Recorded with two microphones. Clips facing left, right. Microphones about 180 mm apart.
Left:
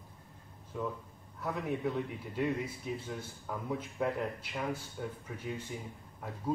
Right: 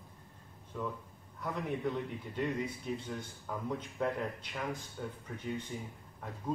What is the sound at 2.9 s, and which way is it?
A man's voice, 5° left (ahead or behind).